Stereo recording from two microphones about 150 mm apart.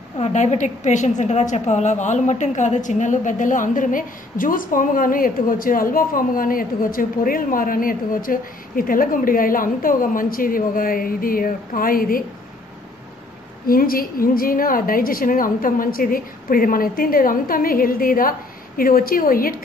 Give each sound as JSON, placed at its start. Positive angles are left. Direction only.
{"t": 0.2, "sound": "a woman's voice", "side_deg": 50}
{"t": 13.7, "sound": "a woman's voice", "side_deg": 75}